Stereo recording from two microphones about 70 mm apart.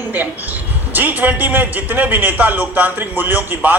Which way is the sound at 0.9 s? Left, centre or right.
Right.